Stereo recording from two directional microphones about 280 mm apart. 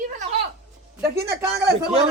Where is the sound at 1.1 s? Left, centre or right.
Centre.